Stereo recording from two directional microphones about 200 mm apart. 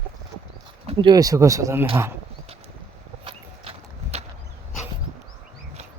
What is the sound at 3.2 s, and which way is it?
Horse, 30° right (ahead or behind).